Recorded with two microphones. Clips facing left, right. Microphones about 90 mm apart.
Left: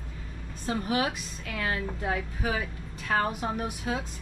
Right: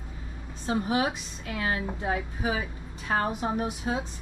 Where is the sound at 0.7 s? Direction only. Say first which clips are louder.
Right 2 dB; 20° right (ahead or behind).